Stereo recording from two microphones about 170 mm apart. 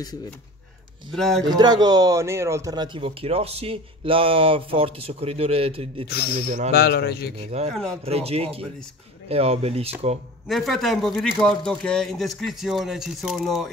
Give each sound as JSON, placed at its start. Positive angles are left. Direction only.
{"t": 1.1, "sound": "speech", "side_deg": 0}
{"t": 1.5, "sound": "speech", "side_deg": -25}
{"t": 6.7, "sound": "a man's voice", "side_deg": 65}
{"t": 7.3, "sound": "speech", "side_deg": -35}
{"t": 7.7, "sound": "speech", "side_deg": 5}
{"t": 8.0, "sound": "speech", "side_deg": -35}
{"t": 10.5, "sound": "speech", "side_deg": 0}